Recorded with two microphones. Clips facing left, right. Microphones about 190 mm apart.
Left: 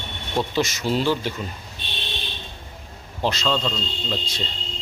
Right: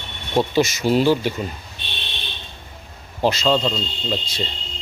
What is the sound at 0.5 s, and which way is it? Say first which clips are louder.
Speech: right 5 dB; 10° right (ahead or behind).